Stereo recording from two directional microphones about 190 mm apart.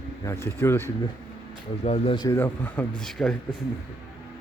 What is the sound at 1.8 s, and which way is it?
Speech, 30° left (ahead or behind).